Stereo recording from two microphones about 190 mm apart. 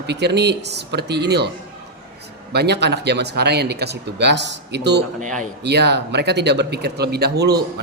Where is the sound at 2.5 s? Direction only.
60° right (ahead or behind).